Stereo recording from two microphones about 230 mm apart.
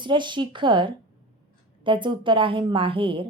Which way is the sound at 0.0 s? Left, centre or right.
Centre.